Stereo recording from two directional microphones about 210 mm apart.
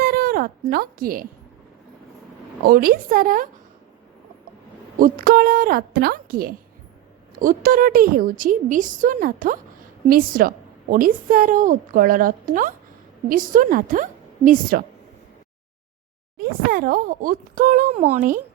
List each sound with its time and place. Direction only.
0.0 s a sound: 45° right (ahead or behind)
2.6 s a woman's voice: 45° right (ahead or behind)
4.9 s a woman's voice: 40° right (ahead or behind)
16.4 s a woman's voice: 45° right (ahead or behind)